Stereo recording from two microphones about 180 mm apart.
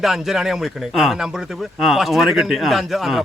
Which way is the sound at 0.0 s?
Centre (ahead or behind).